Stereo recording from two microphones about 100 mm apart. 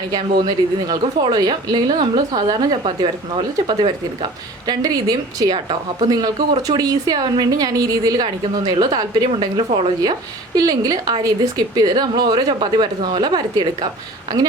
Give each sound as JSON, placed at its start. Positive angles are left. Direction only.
{"t": 0.2, "sound": "a woman's voice", "side_deg": -45}
{"t": 3.8, "sound": "speech", "side_deg": -75}
{"t": 4.6, "sound": "a woman's voice", "side_deg": -40}
{"t": 5.5, "sound": "a woman's voice", "side_deg": -60}
{"t": 6.1, "sound": "a woman's voice", "side_deg": -40}
{"t": 9.6, "sound": "speech", "side_deg": -70}
{"t": 10.0, "sound": "a woman's voice", "side_deg": -40}